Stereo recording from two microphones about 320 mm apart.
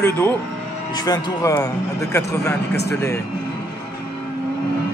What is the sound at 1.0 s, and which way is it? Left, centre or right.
Speech, centre.